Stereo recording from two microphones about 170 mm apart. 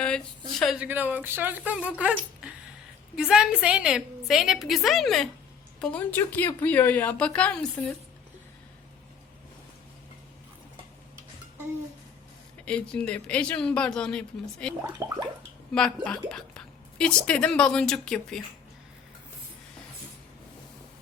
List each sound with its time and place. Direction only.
0.6 s a woman's voice: centre (ahead or behind)
12.6 s a woman's voice: 5° left (ahead or behind)
14.9 s gargling: 20° right (ahead or behind)
15.7 s a woman's voice: 5° left (ahead or behind)